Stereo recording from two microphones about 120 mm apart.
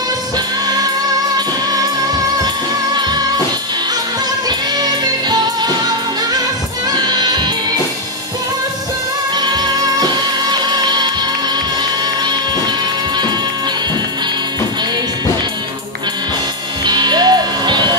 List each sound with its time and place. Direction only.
4.5 s music: 35° right (ahead or behind)
7.0 s music: 35° right (ahead or behind)
9.4 s music: 35° right (ahead or behind)
16.8 s music: 35° right (ahead or behind)